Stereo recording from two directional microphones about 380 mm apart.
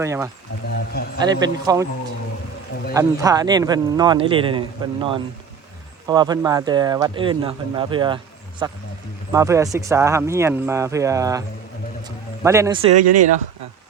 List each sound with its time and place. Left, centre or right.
0.0 s speech: centre
2.9 s speech: centre
13.0 s speech: right